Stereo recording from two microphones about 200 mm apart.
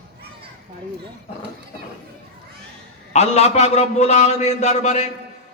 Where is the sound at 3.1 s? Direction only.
35° left (ahead or behind).